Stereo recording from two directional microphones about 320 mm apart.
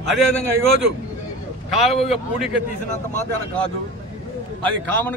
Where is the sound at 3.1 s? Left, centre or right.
Centre.